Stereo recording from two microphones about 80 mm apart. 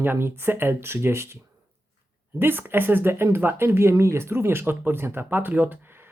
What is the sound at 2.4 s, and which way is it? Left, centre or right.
Speech, right.